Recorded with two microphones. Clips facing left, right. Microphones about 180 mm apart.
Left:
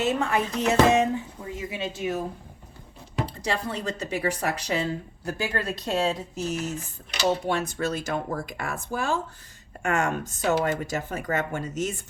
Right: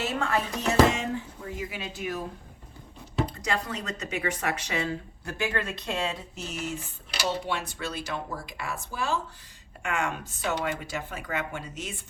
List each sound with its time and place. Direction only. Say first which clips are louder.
0.0 s speech: left 4 dB; 20° left (ahead or behind)
3.2 s speech: left 2 dB; 30° left (ahead or behind)